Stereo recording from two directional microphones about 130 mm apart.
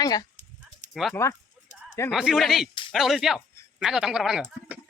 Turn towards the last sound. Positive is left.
turn(degrees=-5)  # may be behind; listen again after turning